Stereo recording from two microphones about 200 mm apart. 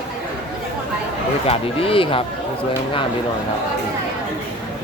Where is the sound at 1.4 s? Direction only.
30° left (ahead or behind).